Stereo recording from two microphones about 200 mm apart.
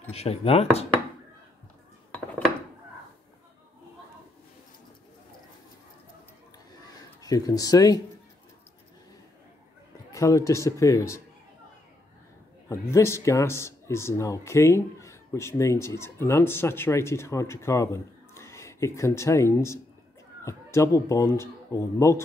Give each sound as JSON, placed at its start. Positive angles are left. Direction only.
{"t": 0.1, "sound": "chopping", "side_deg": 30}
{"t": 2.1, "sound": "dishes", "side_deg": 5}
{"t": 7.2, "sound": "speech", "side_deg": 15}
{"t": 10.1, "sound": "speech", "side_deg": 15}
{"t": 12.6, "sound": "speech", "side_deg": 15}